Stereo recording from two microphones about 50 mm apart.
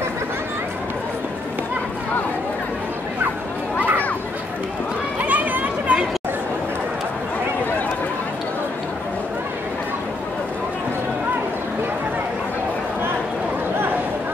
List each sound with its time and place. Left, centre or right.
5.2 s chatter: right